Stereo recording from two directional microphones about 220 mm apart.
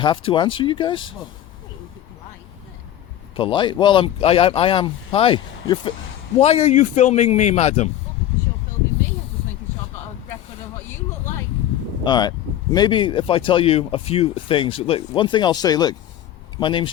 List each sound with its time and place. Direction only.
0.3 s speech: 20° left (ahead or behind)
3.3 s a man's voice: 20° left (ahead or behind)
12.0 s speech: 20° left (ahead or behind)